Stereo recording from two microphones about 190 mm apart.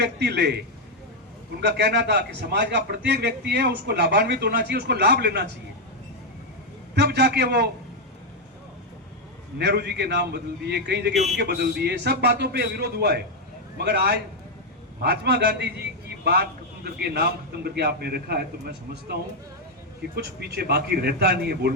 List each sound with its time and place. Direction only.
0.0 s a man's voice: 60° right (ahead or behind)
1.6 s a man's voice: 60° right (ahead or behind)
6.9 s a man's voice: 60° right (ahead or behind)
9.6 s a man's voice: 60° right (ahead or behind)
20.1 s a man's voice: 60° right (ahead or behind)